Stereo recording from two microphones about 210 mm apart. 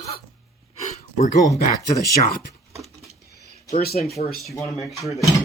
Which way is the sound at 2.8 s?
Centre (ahead or behind).